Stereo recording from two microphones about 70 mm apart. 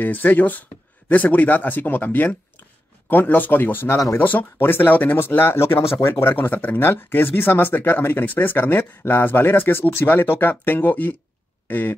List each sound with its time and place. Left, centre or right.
0.0 s speech: left